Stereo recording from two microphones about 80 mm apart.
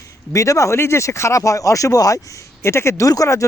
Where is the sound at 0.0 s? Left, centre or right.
Left.